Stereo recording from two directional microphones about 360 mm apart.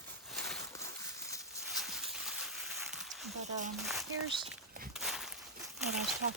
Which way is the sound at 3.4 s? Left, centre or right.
Centre.